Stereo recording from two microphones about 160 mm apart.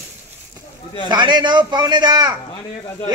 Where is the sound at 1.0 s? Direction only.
30° right (ahead or behind).